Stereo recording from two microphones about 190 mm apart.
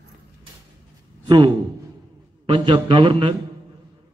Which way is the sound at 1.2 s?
25° right (ahead or behind).